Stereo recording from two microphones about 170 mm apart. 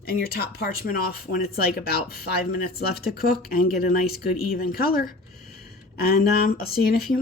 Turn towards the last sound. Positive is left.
turn(degrees=60)  # may be behind; listen again after turning